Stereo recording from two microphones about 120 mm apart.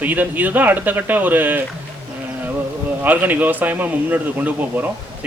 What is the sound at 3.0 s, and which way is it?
Speech, 15° right (ahead or behind).